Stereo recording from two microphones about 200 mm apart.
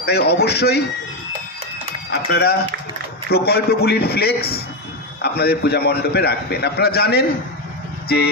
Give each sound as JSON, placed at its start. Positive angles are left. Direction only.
{"t": 0.0, "sound": "speech", "side_deg": 55}
{"t": 2.0, "sound": "a man's voice", "side_deg": 55}